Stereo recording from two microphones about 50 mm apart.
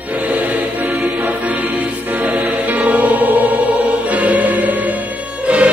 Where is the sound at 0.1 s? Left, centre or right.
Right.